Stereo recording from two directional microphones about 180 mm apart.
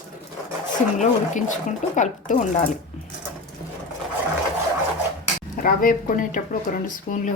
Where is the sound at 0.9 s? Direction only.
45° left (ahead or behind).